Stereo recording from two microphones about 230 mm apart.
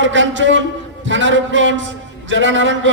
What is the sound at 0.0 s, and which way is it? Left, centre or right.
A man's voice, right.